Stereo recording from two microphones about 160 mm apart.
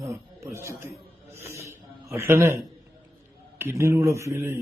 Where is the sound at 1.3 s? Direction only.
15° right (ahead or behind).